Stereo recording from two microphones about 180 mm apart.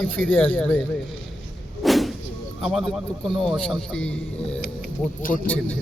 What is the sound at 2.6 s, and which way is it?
A man's voice, centre (ahead or behind).